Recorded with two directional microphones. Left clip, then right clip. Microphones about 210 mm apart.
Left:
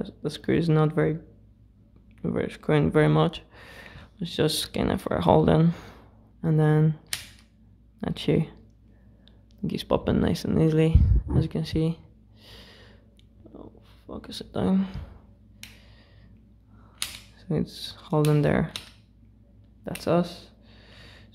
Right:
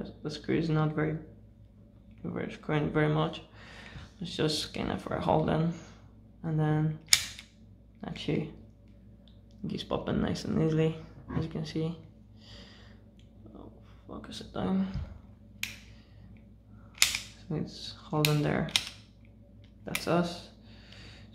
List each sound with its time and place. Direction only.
0.0 s speech: 50° left (ahead or behind)
2.2 s speech: 50° left (ahead or behind)
8.0 s speech: 50° left (ahead or behind)
9.6 s speech: 50° left (ahead or behind)
17.5 s speech: 50° left (ahead or behind)
19.8 s a sound: 45° left (ahead or behind)